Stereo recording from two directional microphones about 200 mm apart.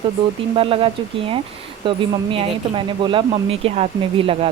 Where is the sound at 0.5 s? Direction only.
30° right (ahead or behind).